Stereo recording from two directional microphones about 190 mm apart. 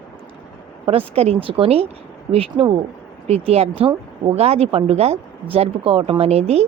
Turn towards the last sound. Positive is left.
turn(degrees=-35)  # may be behind; listen again after turning